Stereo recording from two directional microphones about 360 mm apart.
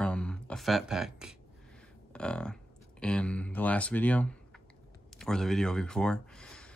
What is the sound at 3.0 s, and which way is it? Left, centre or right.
Speech, centre.